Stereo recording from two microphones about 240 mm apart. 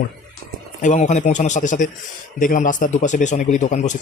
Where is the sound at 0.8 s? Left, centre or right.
Left.